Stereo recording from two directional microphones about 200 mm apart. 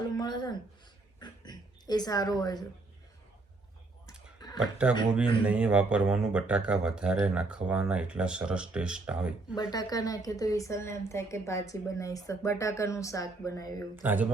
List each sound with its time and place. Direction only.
0.2 s speech: 20° left (ahead or behind)
4.4 s a sound: 20° left (ahead or behind)
4.6 s speech: 5° right (ahead or behind)
9.6 s a woman's voice: 20° left (ahead or behind)
13.9 s speech: 10° right (ahead or behind)